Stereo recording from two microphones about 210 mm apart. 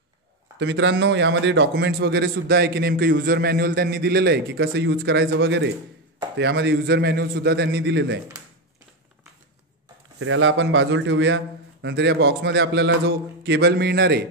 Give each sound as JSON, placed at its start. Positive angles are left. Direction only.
{"t": 0.6, "sound": "a man's voice", "side_deg": -60}
{"t": 10.1, "sound": "a man's voice", "side_deg": -65}